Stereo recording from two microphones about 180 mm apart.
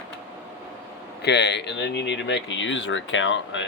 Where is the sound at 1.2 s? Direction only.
70° left (ahead or behind).